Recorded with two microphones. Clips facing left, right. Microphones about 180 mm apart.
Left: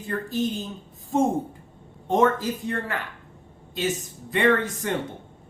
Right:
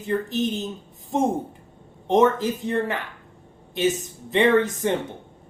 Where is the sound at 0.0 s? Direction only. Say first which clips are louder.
Right 3 dB; 20° right (ahead or behind).